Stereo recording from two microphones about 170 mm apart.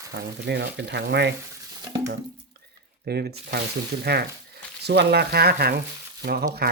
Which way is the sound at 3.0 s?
70° right (ahead or behind).